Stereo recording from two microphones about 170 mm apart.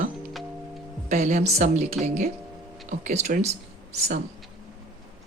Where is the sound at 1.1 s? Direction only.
45° right (ahead or behind).